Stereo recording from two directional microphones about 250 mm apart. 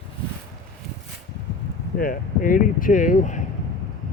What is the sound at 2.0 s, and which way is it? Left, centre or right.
Speech, left.